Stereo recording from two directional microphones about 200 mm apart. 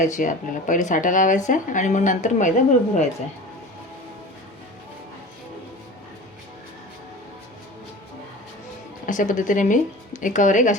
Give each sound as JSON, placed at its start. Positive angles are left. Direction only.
{"t": 0.0, "sound": "a woman's voice", "side_deg": 40}
{"t": 9.0, "sound": "a woman's voice", "side_deg": 40}